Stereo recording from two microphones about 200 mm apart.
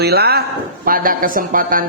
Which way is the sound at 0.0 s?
55° right (ahead or behind).